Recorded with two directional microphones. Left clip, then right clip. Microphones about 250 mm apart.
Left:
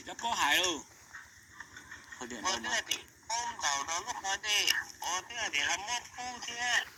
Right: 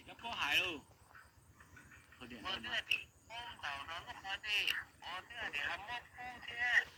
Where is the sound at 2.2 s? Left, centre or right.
Left.